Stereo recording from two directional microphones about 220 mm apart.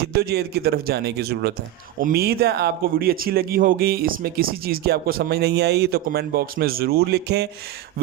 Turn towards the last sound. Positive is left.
turn(degrees=-50)  # may be behind; listen again after turning